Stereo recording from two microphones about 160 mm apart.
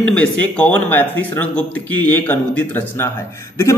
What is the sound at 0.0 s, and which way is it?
A man's voice, 5° left (ahead or behind).